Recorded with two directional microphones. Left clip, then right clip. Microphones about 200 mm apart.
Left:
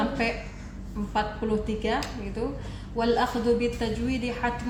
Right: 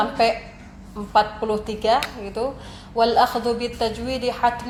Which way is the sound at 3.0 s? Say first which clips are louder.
Right 7 dB; 30° right (ahead or behind).